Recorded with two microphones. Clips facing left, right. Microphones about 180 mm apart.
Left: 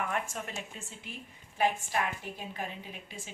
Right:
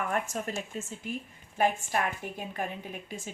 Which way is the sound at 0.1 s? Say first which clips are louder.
Right 4 dB; 40° right (ahead or behind).